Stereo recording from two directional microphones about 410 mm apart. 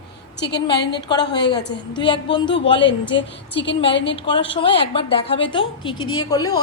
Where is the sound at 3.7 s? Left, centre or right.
Centre.